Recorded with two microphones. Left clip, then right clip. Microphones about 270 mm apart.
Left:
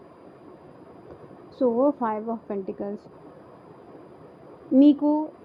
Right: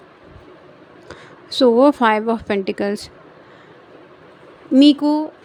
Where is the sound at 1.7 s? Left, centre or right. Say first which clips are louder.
Right 10 dB; right.